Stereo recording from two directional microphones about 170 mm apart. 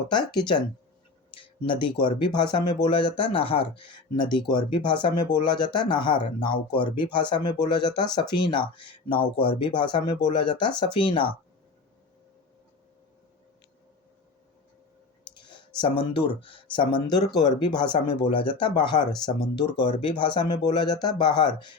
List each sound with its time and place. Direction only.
0.1 s speech: 25° left (ahead or behind)
15.4 s speech: 25° left (ahead or behind)